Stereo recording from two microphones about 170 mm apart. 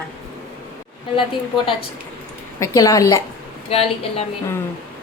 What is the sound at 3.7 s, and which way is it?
Speech, 35° left (ahead or behind).